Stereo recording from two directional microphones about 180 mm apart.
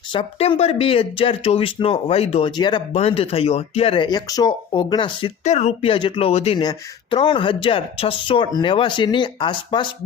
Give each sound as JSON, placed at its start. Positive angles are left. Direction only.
{"t": 0.1, "sound": "speech", "side_deg": 30}
{"t": 5.4, "sound": "a woman's voice", "side_deg": 40}